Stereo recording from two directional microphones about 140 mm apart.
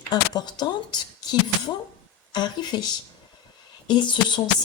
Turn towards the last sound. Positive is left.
turn(degrees=35)  # may be behind; listen again after turning